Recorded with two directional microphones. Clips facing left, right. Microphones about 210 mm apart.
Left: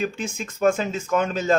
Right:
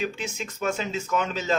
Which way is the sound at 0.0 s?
50° left (ahead or behind).